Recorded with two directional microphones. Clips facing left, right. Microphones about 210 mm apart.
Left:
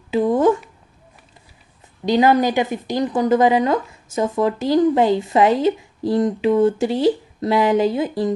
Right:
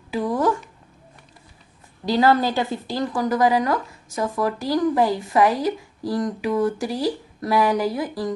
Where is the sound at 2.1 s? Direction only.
20° left (ahead or behind).